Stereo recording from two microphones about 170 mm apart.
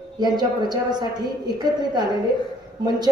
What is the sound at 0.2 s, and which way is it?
Speech, 25° right (ahead or behind).